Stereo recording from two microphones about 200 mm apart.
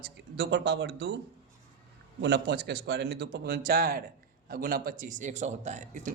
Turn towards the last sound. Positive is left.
turn(degrees=-40)  # may be behind; listen again after turning